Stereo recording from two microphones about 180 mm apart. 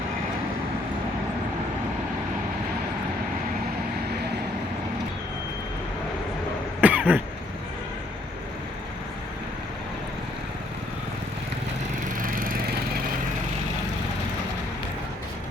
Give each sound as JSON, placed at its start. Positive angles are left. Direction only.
{"t": 6.8, "sound": "cough", "side_deg": -10}
{"t": 12.2, "sound": "lawn mower", "side_deg": -50}